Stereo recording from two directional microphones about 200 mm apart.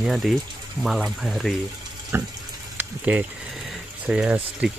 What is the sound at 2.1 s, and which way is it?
Speech, 15° right (ahead or behind).